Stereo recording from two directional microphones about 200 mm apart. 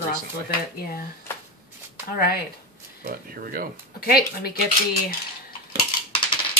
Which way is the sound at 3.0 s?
50° right (ahead or behind).